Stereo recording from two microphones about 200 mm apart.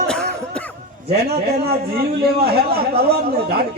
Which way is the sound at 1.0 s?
50° right (ahead or behind).